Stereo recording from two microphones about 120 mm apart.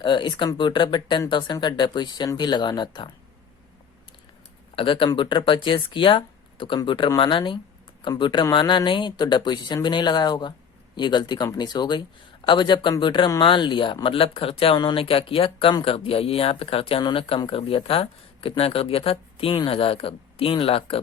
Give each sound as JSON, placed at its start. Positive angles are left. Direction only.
{"t": 0.0, "sound": "speech", "side_deg": 40}
{"t": 4.7, "sound": "speech", "side_deg": 45}